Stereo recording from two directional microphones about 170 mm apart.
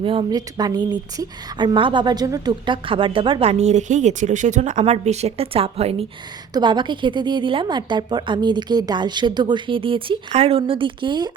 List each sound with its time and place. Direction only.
0.0 s a woman's voice: 30° right (ahead or behind)